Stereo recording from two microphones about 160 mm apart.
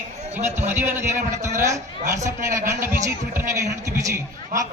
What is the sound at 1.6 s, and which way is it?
A man's voice, 20° right (ahead or behind).